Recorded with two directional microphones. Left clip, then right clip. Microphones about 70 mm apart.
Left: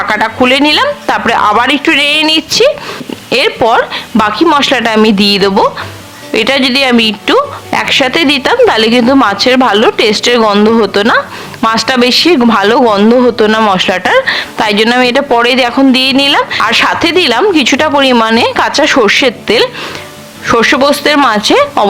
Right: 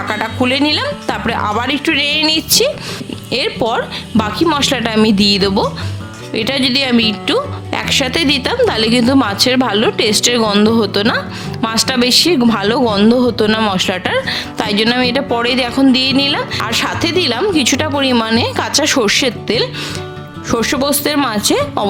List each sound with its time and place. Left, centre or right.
0.0 s speech: left